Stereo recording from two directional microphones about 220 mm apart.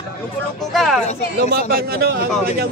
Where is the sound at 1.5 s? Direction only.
45° right (ahead or behind).